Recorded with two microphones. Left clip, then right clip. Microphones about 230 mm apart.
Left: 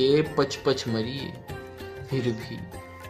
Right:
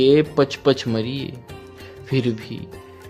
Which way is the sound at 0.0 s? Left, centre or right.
Right.